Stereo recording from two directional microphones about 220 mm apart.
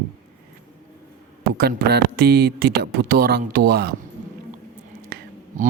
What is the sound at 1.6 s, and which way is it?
Speech, 45° right (ahead or behind).